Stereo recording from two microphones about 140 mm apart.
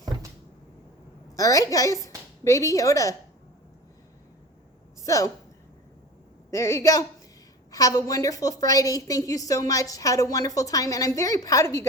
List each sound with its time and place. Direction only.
1.4 s a woman's voice: 25° left (ahead or behind)
5.0 s a woman's voice: 25° left (ahead or behind)
6.5 s a woman's voice: 20° left (ahead or behind)